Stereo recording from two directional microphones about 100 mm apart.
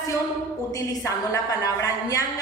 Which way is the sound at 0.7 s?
30° left (ahead or behind).